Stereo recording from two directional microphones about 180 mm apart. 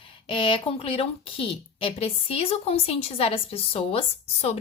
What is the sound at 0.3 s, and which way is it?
A woman's voice, 30° left (ahead or behind).